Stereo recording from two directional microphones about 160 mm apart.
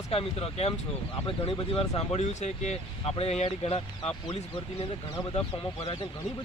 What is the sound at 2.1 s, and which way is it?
Speech, 45° left (ahead or behind).